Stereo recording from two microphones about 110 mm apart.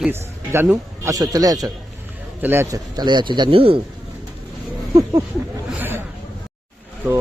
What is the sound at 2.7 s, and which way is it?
Speech, 40° right (ahead or behind).